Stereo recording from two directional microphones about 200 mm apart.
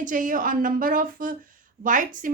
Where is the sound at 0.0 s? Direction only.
40° right (ahead or behind).